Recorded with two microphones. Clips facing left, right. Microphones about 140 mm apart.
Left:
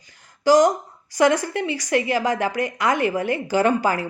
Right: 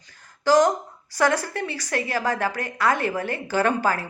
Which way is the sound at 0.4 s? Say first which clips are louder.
Left 3 dB; 15° left (ahead or behind).